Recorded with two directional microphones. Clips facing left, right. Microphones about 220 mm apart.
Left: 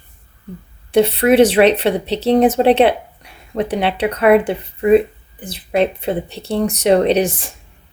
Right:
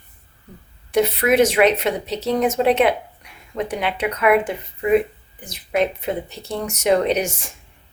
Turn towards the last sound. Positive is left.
turn(degrees=30)  # may be behind; listen again after turning